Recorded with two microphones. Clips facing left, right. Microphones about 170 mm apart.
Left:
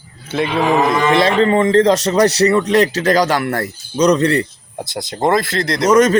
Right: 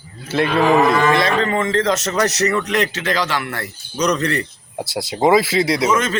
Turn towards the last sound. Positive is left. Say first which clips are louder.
# left 8 dB
turn(degrees=40)  # may be behind; listen again after turning